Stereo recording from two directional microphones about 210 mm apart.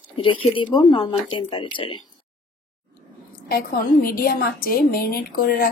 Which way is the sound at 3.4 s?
45° left (ahead or behind).